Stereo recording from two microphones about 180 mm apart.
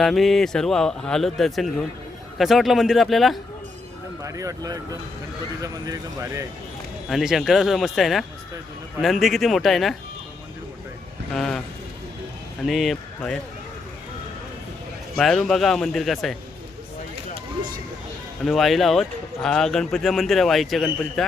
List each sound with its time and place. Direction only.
0.0 s speech: centre (ahead or behind)
4.2 s speech: 20° right (ahead or behind)
7.1 s speech: centre (ahead or behind)
11.3 s speech: 5° left (ahead or behind)
12.6 s speech: centre (ahead or behind)
15.1 s speech: centre (ahead or behind)
18.4 s speech: centre (ahead or behind)